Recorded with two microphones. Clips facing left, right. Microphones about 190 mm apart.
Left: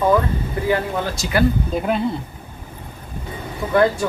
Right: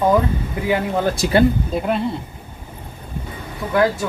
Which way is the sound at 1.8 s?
Centre (ahead or behind).